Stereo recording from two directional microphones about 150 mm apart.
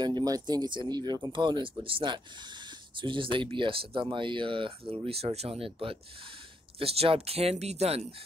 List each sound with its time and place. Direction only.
0.0 s speech: 30° right (ahead or behind); by 8.1 s 45° right (ahead or behind)